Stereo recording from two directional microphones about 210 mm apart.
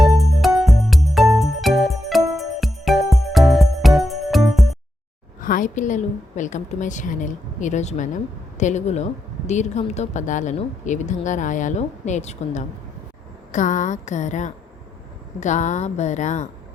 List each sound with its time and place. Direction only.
0.2 s music: centre (ahead or behind)
5.4 s a woman's voice: 40° left (ahead or behind)